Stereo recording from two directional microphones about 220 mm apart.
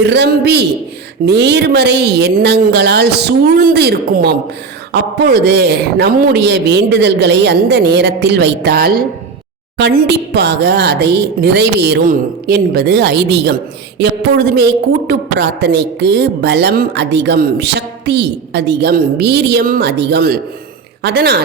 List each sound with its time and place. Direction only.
0.0 s a woman's voice: 50° right (ahead or behind)